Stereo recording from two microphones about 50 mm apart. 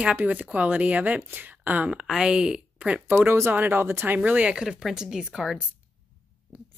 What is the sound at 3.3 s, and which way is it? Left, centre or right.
Speech, right.